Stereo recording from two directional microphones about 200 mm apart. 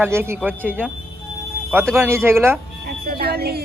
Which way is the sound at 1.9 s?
10° right (ahead or behind).